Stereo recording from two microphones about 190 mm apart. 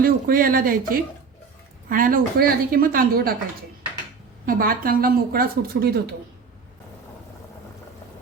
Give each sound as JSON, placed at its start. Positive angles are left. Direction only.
{"t": 0.0, "sound": "a woman's voice", "side_deg": -50}
{"t": 4.4, "sound": "a woman's voice", "side_deg": -45}